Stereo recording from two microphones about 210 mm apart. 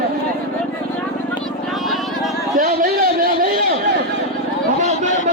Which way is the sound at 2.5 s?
40° right (ahead or behind).